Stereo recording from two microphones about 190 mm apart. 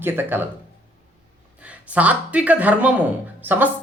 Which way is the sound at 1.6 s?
5° right (ahead or behind).